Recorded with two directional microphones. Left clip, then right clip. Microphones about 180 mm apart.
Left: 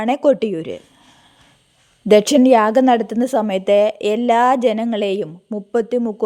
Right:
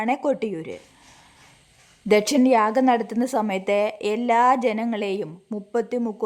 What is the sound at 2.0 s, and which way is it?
A woman's voice, 25° left (ahead or behind).